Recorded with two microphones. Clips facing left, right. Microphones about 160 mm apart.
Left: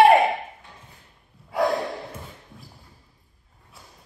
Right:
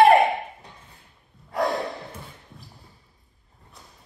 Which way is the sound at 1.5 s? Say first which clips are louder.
Left 2 dB; centre (ahead or behind).